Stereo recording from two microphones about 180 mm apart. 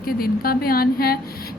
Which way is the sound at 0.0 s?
55° left (ahead or behind).